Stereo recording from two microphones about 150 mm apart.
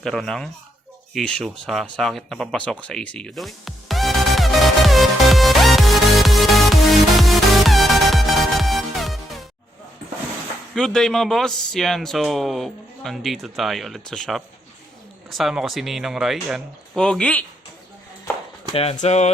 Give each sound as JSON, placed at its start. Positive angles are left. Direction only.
{"t": 0.0, "sound": "speech", "side_deg": 5}
{"t": 1.1, "sound": "a sound", "side_deg": 5}
{"t": 7.2, "sound": "music", "side_deg": 0}
{"t": 10.8, "sound": "speech", "side_deg": 5}
{"t": 18.7, "sound": "speech", "side_deg": 40}